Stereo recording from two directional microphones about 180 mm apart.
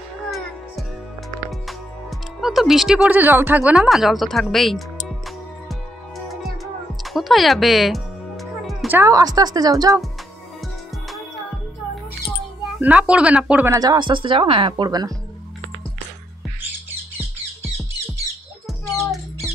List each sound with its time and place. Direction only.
1.5 s speech: centre (ahead or behind)
6.2 s music: centre (ahead or behind)
8.9 s speech: 20° right (ahead or behind)
12.8 s speech: 5° right (ahead or behind)
13.7 s speech: 25° right (ahead or behind)